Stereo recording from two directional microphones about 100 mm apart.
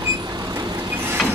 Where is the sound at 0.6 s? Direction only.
45° right (ahead or behind).